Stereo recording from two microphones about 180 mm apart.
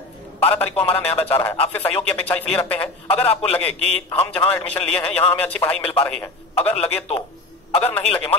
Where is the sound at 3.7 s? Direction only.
35° right (ahead or behind).